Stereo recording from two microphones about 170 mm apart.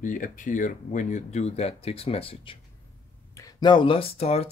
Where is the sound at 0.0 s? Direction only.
50° left (ahead or behind); by 2.5 s 35° left (ahead or behind).